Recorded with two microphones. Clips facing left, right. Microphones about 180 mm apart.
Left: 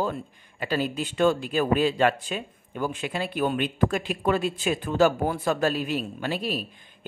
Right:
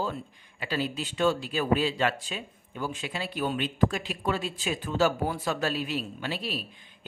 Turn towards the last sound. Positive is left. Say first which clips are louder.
# left 5 dB
turn(degrees=45)  # may be behind; listen again after turning